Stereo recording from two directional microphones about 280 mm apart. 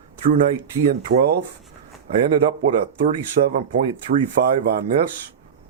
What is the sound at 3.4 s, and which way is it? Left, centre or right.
Speech, right.